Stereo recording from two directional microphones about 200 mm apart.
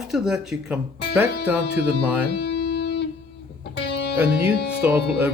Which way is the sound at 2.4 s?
55° left (ahead or behind).